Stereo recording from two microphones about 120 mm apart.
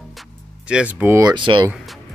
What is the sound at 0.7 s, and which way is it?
Speech, 10° right (ahead or behind).